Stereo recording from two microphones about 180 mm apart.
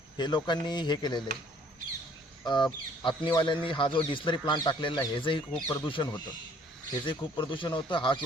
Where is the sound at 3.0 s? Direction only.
25° left (ahead or behind).